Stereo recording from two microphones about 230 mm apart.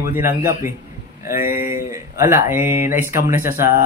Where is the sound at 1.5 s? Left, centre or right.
Left.